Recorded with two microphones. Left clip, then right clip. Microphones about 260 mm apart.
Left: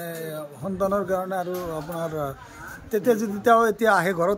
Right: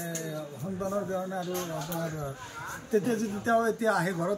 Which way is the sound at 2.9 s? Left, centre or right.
Centre.